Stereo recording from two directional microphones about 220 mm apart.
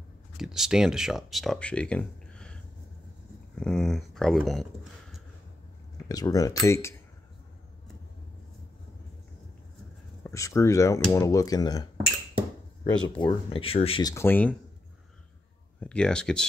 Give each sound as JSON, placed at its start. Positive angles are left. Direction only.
{"t": 0.4, "sound": "speech", "side_deg": 0}
{"t": 6.0, "sound": "speech", "side_deg": 15}
{"t": 10.2, "sound": "speech", "side_deg": 15}
{"t": 13.2, "sound": "speech", "side_deg": 20}
{"t": 14.1, "sound": "speech", "side_deg": 10}
{"t": 15.8, "sound": "speech", "side_deg": 5}